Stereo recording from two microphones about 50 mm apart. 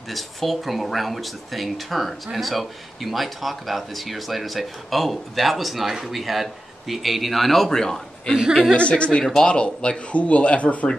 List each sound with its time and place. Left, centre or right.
0.1 s speech: centre
8.7 s speech: left
9.2 s speech: centre
9.5 s speech: left